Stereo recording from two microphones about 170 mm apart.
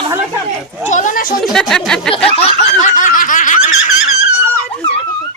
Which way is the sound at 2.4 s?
40° left (ahead or behind).